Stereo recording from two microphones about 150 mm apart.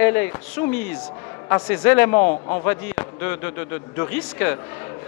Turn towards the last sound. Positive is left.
turn(degrees=10)  # may be behind; listen again after turning